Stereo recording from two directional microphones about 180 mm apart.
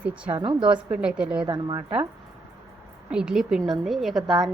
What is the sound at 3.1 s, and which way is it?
A woman's voice, 5° right (ahead or behind).